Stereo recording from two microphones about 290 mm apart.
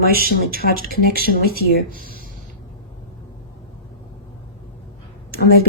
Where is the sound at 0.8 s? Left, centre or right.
Right.